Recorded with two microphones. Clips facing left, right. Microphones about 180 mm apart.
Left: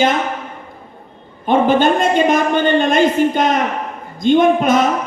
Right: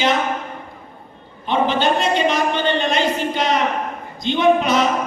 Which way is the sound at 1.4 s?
50° left (ahead or behind).